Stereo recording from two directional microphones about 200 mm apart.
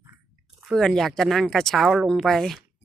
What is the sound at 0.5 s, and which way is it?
Speech, centre (ahead or behind).